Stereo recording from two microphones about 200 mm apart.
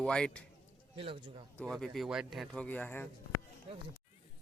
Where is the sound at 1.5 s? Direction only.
5° left (ahead or behind).